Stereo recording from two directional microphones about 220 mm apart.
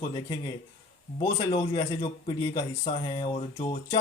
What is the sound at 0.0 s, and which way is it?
A man's voice, 20° left (ahead or behind).